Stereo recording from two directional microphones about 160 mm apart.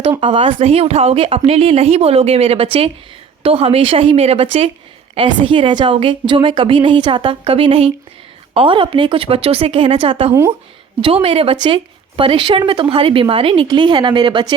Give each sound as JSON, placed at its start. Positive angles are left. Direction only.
{"t": 0.2, "sound": "speech", "side_deg": -35}